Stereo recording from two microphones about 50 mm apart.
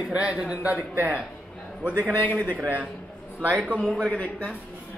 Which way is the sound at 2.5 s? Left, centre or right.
Right.